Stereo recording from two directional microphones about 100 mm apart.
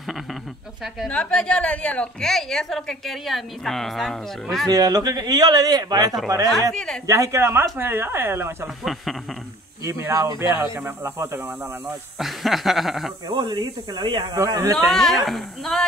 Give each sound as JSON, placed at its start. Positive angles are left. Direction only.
{"t": 1.0, "sound": "a woman's voice", "side_deg": 10}
{"t": 4.6, "sound": "speech", "side_deg": -40}
{"t": 6.7, "sound": "a woman's voice", "side_deg": 5}
{"t": 7.1, "sound": "speech", "side_deg": -30}
{"t": 9.8, "sound": "speech", "side_deg": -30}
{"t": 12.2, "sound": "a woman's voice", "side_deg": 0}
{"t": 13.3, "sound": "speech", "side_deg": -45}
{"t": 14.4, "sound": "speech", "side_deg": -30}
{"t": 14.8, "sound": "a woman's voice", "side_deg": 5}